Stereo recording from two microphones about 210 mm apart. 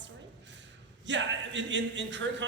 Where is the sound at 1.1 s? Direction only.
60° right (ahead or behind).